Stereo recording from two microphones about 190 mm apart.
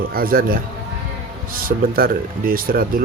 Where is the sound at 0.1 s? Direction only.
50° right (ahead or behind).